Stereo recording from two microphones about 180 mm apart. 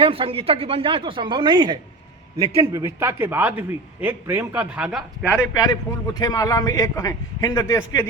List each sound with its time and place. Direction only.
0.0 s a man's voice: 30° right (ahead or behind); by 5.4 s 5° right (ahead or behind)
5.5 s a man's voice: 20° left (ahead or behind)